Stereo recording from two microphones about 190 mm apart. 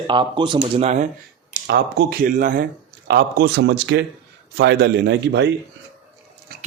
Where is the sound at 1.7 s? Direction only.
60° right (ahead or behind).